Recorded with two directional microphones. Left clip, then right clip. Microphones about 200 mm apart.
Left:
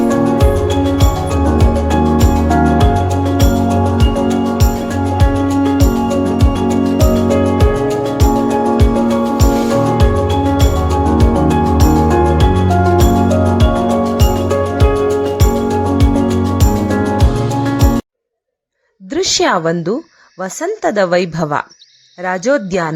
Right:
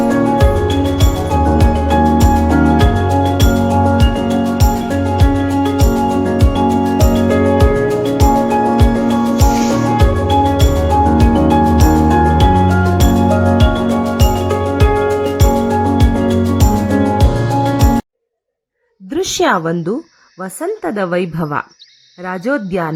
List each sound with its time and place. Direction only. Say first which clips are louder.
0.0 s music: even; centre (ahead or behind)
19.1 s a woman's voice: left 1 dB; 15° left (ahead or behind)